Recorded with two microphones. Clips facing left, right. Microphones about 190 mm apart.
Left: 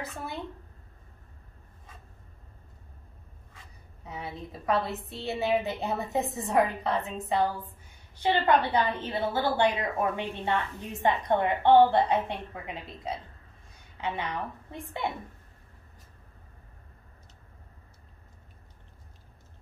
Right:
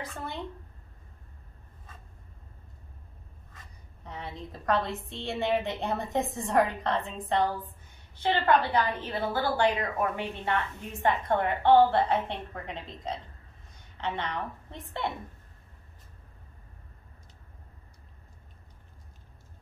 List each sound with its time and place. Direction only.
0.0 s a woman's voice: 5° left (ahead or behind)
3.5 s a woman's voice: 10° left (ahead or behind)